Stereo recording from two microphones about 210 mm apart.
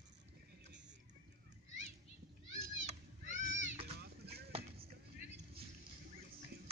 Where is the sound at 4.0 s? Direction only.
50° right (ahead or behind).